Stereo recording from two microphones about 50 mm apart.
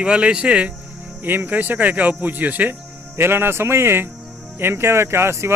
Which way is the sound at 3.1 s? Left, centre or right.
Right.